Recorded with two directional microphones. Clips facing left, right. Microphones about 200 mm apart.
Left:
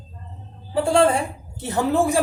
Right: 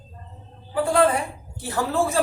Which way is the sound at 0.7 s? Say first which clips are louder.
Left 2 dB; 30° left (ahead or behind).